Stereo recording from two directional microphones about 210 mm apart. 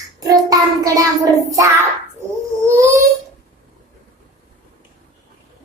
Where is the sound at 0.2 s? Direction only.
15° right (ahead or behind).